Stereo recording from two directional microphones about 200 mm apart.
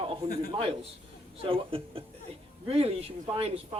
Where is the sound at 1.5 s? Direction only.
30° right (ahead or behind).